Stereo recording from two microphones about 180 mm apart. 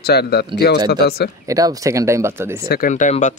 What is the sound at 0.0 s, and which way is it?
Speech, 60° left (ahead or behind).